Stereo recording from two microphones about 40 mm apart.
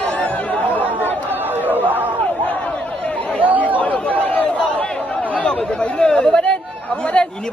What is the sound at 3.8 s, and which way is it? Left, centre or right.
Chatter, left.